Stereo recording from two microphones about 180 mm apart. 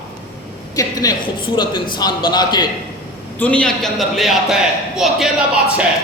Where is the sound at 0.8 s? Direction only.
20° left (ahead or behind).